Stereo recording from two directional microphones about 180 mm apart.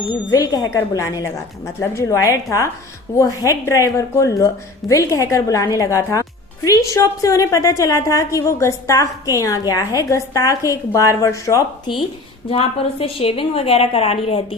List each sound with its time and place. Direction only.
0.3 s a woman's voice: 20° left (ahead or behind)
12.5 s a woman's voice: 30° left (ahead or behind)